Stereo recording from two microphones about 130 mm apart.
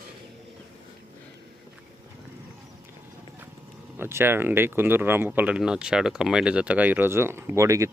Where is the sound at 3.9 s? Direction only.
15° right (ahead or behind).